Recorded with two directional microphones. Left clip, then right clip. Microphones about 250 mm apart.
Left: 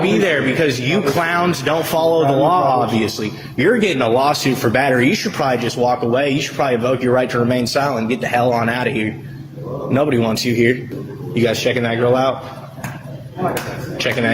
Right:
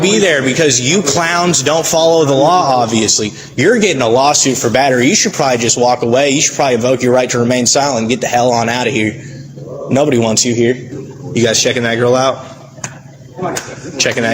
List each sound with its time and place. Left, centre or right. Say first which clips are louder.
0.0 s speech: right 5 dB; right
11.3 s speech: right 5 dB; right
14.0 s speech: right 4 dB; right